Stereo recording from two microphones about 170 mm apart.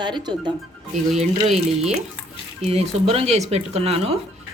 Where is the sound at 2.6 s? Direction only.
40° right (ahead or behind).